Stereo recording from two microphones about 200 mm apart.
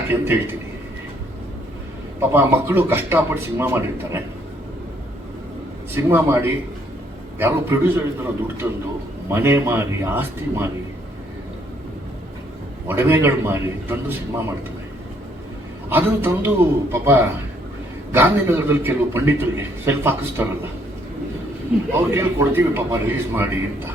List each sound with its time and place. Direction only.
0.1 s a man's voice: 10° right (ahead or behind)
2.3 s a man's voice: 10° right (ahead or behind)
5.9 s a man's voice: 10° right (ahead or behind)
12.9 s a man's voice: 10° right (ahead or behind)
15.9 s a man's voice: 10° right (ahead or behind)
22.1 s a man's voice: 10° right (ahead or behind)